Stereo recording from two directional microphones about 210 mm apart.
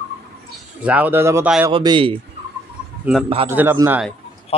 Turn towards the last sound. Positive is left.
turn(degrees=25)  # may be behind; listen again after turning